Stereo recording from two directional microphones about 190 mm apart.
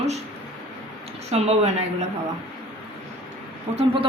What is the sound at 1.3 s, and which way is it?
Speech, 35° right (ahead or behind).